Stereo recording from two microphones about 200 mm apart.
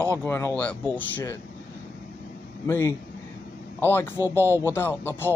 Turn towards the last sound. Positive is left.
turn(degrees=10)  # may be behind; listen again after turning